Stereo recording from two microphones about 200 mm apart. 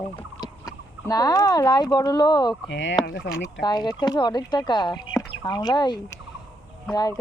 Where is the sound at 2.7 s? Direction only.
65° left (ahead or behind).